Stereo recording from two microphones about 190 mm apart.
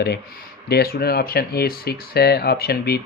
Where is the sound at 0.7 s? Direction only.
55° left (ahead or behind).